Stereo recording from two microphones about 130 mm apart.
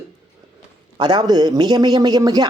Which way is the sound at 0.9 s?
35° right (ahead or behind).